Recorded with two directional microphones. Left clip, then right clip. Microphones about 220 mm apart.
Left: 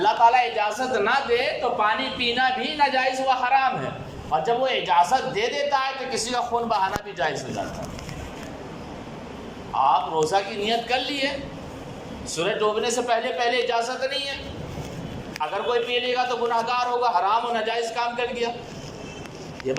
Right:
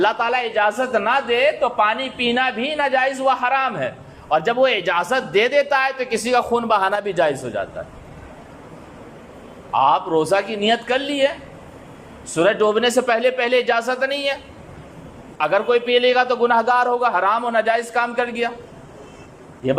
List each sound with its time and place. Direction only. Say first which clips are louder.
0.0 s a man's voice: left 1 dB; 45° right (ahead or behind)
9.7 s a man's voice: right 4 dB; 45° right (ahead or behind)
12.3 s a man's voice: right 7 dB; 40° right (ahead or behind)
15.4 s a man's voice: right 7 dB; 50° right (ahead or behind)
19.6 s a man's voice: right 7 dB; 45° right (ahead or behind)